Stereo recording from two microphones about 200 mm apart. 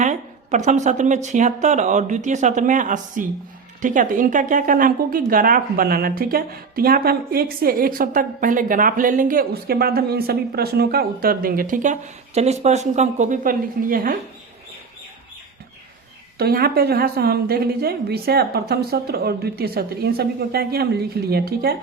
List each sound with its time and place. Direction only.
0.0 s a woman's voice: 35° right (ahead or behind)
16.4 s a woman's voice: 50° right (ahead or behind)